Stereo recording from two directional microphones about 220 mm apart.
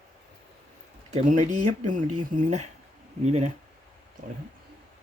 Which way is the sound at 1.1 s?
35° right (ahead or behind).